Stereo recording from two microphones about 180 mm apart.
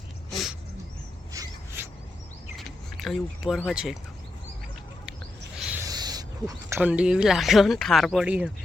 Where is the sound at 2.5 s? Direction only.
Centre (ahead or behind).